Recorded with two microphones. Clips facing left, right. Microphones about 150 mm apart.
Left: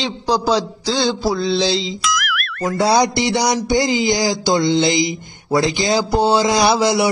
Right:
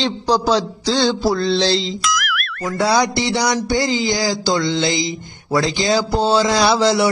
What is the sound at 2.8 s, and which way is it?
Speech, 20° left (ahead or behind).